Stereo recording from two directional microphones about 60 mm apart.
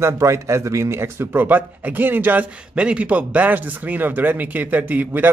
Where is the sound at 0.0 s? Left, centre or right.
Right.